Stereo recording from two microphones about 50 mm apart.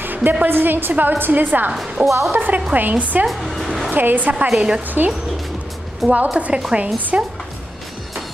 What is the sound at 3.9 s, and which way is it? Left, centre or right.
Speech, right.